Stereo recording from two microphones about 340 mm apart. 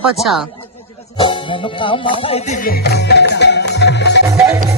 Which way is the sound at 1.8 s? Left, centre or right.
Centre.